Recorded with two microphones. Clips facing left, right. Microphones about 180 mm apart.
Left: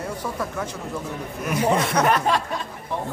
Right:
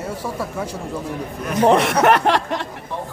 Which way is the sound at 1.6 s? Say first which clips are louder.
Right 6 dB; 75° right (ahead or behind).